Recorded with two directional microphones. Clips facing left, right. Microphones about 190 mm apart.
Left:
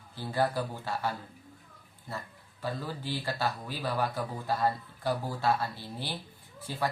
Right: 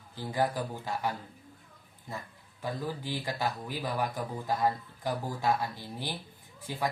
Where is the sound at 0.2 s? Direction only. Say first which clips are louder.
Left 1 dB; 15° right (ahead or behind).